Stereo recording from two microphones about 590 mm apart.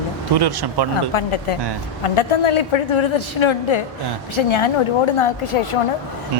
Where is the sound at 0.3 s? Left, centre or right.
Right.